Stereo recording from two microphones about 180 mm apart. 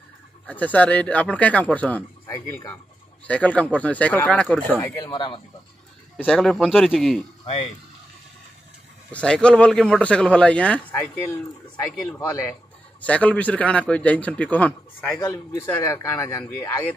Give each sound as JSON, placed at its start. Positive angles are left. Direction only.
{"t": 0.5, "sound": "speech", "side_deg": 10}
{"t": 5.0, "sound": "speech", "side_deg": 25}
{"t": 6.1, "sound": "a man's voice", "side_deg": 5}
{"t": 9.1, "sound": "speech", "side_deg": 5}
{"t": 13.0, "sound": "speech", "side_deg": 5}